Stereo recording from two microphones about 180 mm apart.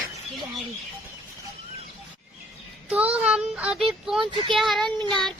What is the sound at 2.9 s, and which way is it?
Child singing, 5° right (ahead or behind).